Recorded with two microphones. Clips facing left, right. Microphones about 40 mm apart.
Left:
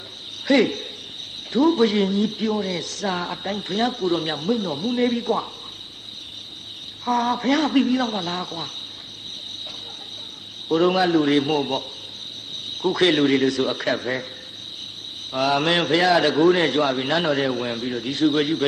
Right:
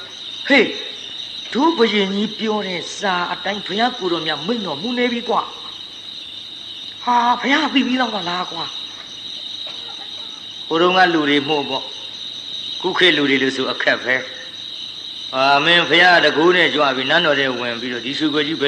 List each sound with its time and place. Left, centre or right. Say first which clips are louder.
0.4 s speech: right 4 dB; right
1.5 s a man's voice: right 3 dB; right
2.6 s speech: right 4 dB; right
7.0 s speech: right 6 dB; right
10.7 s a man's voice: right 5 dB; right
12.8 s a man's voice: right 3 dB; right
15.3 s a man's voice: right 6 dB; right